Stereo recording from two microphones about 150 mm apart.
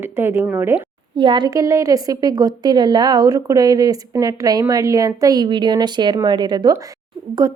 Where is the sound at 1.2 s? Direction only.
30° right (ahead or behind).